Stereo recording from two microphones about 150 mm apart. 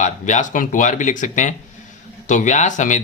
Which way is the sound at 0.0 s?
55° left (ahead or behind).